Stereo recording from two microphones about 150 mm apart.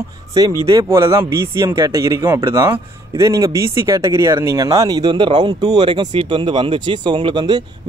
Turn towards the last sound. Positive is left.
turn(degrees=-30)  # may be behind; listen again after turning